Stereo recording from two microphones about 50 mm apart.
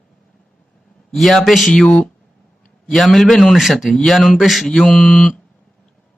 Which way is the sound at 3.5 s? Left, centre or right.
Centre.